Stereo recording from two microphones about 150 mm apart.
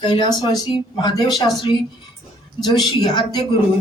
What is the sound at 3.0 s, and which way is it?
Speech, 30° left (ahead or behind).